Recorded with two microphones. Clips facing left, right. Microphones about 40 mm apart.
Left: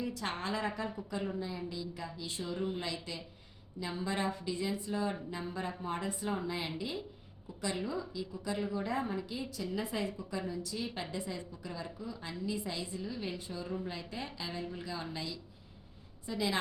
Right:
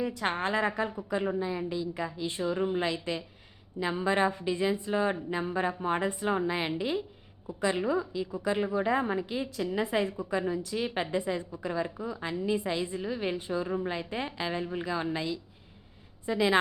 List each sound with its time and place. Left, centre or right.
0.0 s a woman's voice: right
10.0 s a woman's voice: right